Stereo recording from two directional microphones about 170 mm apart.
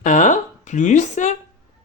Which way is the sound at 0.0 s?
50° left (ahead or behind).